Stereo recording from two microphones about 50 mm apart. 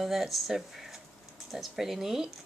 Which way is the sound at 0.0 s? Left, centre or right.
Centre.